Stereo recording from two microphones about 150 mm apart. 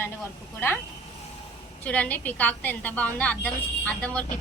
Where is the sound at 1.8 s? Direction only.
10° left (ahead or behind).